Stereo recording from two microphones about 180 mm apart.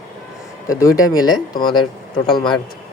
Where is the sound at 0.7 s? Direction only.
20° left (ahead or behind).